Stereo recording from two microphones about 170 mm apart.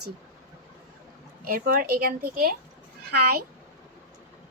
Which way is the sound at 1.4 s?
60° right (ahead or behind).